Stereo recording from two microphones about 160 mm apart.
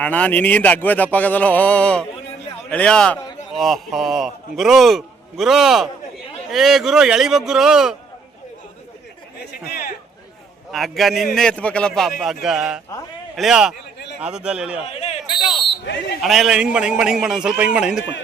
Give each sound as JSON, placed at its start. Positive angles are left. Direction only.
{"t": 0.0, "sound": "a man's voice", "side_deg": 10}
{"t": 9.4, "sound": "speech", "side_deg": 75}
{"t": 10.7, "sound": "a man's voice", "side_deg": 0}
{"t": 14.8, "sound": "fire alarm", "side_deg": 40}
{"t": 16.2, "sound": "a man's voice", "side_deg": 0}